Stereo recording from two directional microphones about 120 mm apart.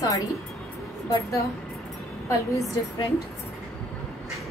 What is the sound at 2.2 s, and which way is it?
Speech, 25° left (ahead or behind).